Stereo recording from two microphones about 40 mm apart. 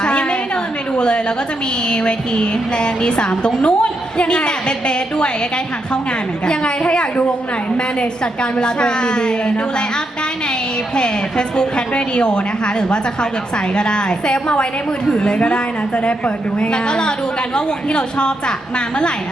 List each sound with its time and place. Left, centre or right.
0.0 s a sound: left
0.9 s a woman's voice: left
6.4 s a woman's voice: left
10.9 s a woman's voice: left